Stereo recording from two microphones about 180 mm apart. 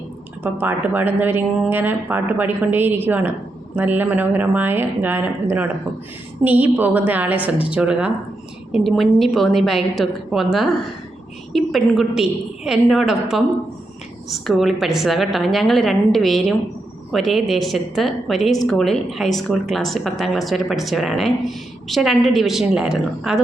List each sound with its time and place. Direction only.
0.4 s speech: 10° right (ahead or behind)